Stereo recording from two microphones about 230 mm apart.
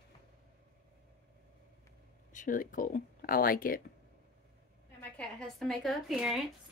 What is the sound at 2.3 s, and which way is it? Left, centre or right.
Speech, left.